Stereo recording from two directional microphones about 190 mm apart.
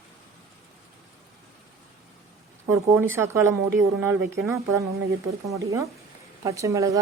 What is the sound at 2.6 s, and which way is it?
Speech, 15° right (ahead or behind).